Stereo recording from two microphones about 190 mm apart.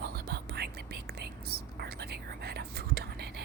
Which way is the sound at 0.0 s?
55° right (ahead or behind).